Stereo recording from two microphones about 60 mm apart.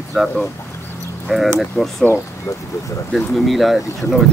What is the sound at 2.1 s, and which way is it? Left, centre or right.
Speech, right.